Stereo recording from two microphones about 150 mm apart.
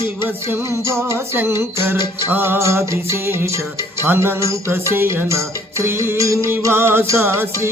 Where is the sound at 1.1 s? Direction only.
15° right (ahead or behind).